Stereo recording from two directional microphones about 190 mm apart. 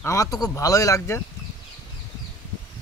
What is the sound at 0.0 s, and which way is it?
Speech, 15° left (ahead or behind).